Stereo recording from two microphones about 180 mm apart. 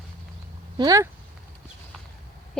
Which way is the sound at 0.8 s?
20° right (ahead or behind).